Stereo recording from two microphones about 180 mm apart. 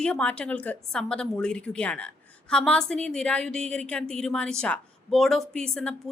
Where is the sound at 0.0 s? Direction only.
5° left (ahead or behind).